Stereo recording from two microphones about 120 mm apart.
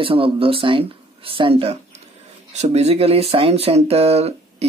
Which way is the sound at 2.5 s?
65° right (ahead or behind).